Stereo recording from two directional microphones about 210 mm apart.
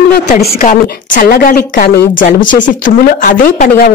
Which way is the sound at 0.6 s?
40° left (ahead or behind).